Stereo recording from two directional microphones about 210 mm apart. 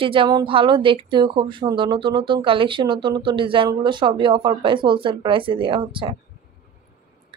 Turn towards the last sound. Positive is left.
turn(degrees=-25)  # may be behind; listen again after turning